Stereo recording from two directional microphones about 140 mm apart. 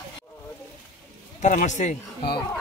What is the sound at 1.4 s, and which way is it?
Speech, 60° left (ahead or behind).